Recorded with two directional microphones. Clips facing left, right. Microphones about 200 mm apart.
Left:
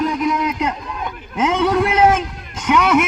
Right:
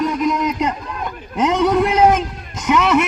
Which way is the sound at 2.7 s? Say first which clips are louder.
Even; 5° left (ahead or behind).